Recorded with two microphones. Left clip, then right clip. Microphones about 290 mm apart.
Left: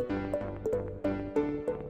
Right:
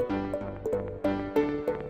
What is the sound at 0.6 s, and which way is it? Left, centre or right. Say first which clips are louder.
Music: right 5 dB; right.